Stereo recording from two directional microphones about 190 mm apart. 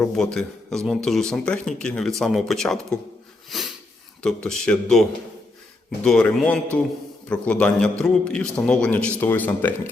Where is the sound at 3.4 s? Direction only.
Centre (ahead or behind).